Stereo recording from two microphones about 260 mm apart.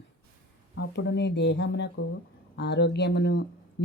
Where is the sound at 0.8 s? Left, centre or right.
Left.